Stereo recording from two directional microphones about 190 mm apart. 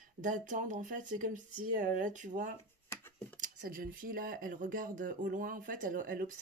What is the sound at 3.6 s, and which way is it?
Speech, 45° right (ahead or behind).